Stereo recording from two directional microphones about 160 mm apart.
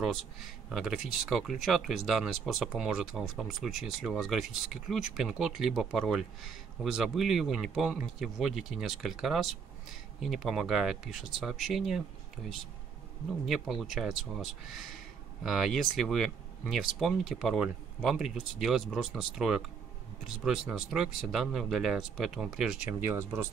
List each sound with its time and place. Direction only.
0.0 s speech: centre (ahead or behind)
13.5 s speech: centre (ahead or behind)